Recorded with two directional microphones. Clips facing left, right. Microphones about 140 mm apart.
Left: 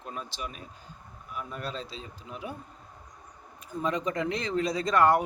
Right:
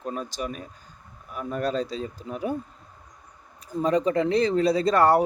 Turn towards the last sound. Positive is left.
turn(degrees=-35)  # may be behind; listen again after turning